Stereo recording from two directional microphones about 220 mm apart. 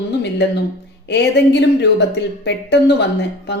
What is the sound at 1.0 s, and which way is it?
Speech, 50° left (ahead or behind).